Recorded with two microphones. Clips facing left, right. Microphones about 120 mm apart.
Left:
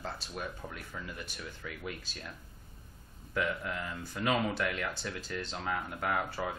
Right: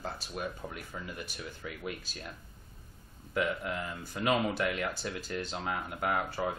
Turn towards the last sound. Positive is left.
turn(degrees=-5)  # may be behind; listen again after turning